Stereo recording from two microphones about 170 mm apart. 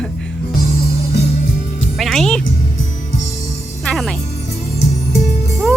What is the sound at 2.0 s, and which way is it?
Speech, centre (ahead or behind).